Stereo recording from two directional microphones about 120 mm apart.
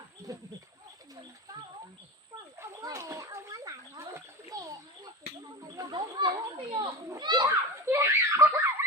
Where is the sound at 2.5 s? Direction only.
25° right (ahead or behind).